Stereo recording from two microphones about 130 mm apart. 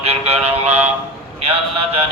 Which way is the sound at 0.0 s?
55° right (ahead or behind).